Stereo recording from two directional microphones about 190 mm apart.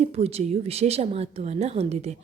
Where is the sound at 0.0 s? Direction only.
35° right (ahead or behind).